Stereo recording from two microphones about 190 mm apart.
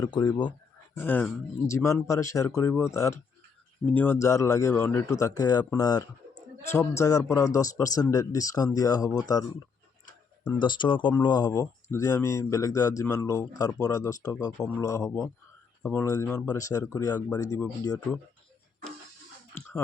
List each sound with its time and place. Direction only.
0.0 s speech: 20° left (ahead or behind)
0.9 s speech: 10° left (ahead or behind)